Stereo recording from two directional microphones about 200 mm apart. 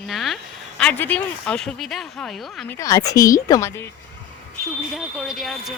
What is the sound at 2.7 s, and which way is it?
A woman's voice, 15° left (ahead or behind).